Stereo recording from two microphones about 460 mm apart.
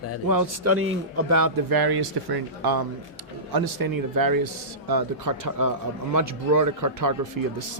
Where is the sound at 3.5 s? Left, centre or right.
Right.